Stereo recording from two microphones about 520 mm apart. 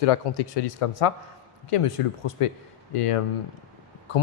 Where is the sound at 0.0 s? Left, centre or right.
Left.